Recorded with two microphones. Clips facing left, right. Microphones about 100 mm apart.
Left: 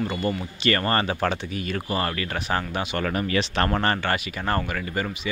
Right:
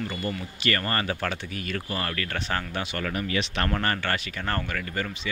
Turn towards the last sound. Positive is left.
turn(degrees=20)  # may be behind; listen again after turning